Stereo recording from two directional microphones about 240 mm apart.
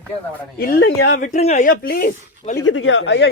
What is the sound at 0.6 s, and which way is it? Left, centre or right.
Speech, left.